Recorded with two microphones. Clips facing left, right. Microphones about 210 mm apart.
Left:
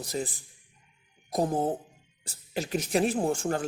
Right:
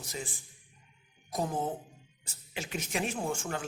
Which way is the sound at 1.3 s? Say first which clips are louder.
Left 6 dB; 35° left (ahead or behind).